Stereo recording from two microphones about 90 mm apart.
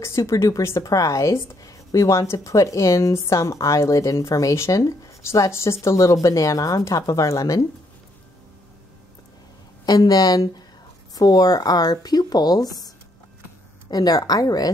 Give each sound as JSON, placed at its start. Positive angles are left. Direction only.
{"t": 0.0, "sound": "speech", "side_deg": 35}
{"t": 9.8, "sound": "speech", "side_deg": 45}